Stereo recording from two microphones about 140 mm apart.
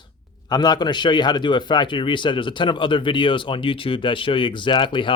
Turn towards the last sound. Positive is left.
turn(degrees=35)  # may be behind; listen again after turning